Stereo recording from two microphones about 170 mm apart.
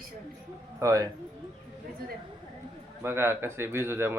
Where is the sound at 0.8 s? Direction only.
20° right (ahead or behind).